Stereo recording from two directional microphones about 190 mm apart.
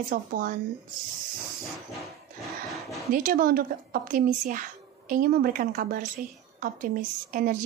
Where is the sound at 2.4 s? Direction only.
Centre (ahead or behind).